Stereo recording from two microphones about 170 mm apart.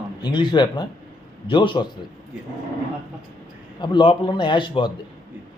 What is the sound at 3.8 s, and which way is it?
A man's voice, 30° left (ahead or behind).